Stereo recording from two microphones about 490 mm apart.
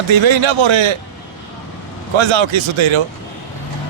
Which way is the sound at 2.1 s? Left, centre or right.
Right.